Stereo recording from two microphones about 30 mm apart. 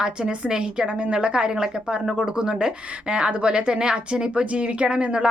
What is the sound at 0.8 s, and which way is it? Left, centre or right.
A woman's voice, right.